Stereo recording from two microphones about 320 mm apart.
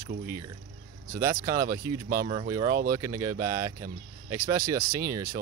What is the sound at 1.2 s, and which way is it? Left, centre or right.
Speech, centre.